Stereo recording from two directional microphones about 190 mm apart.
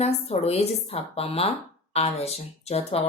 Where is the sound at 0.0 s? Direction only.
35° left (ahead or behind).